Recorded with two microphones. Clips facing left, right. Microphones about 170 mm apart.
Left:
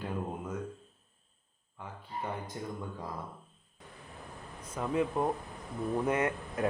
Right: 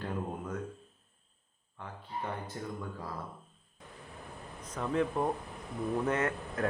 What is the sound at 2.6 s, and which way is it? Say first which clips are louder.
Speech: left 1 dB; 20° left (ahead or behind).